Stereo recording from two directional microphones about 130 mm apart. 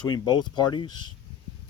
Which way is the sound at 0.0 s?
35° left (ahead or behind).